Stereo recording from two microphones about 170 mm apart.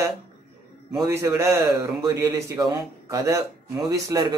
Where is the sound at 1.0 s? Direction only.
15° right (ahead or behind).